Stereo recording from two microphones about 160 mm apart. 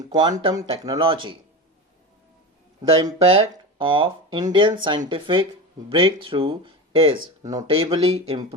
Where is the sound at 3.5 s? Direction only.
30° right (ahead or behind).